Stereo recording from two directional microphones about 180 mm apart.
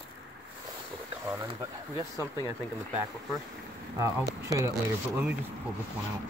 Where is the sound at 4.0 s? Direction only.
15° right (ahead or behind).